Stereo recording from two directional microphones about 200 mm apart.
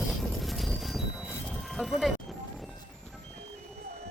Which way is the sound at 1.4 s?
Centre (ahead or behind).